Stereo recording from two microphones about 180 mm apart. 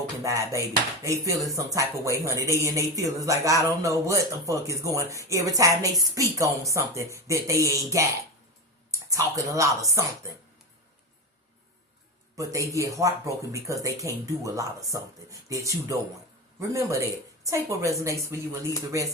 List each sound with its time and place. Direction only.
0.2 s speech: 20° right (ahead or behind)
12.4 s speech: 20° right (ahead or behind)